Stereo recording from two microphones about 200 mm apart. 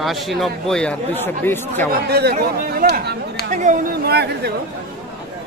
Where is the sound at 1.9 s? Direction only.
50° right (ahead or behind).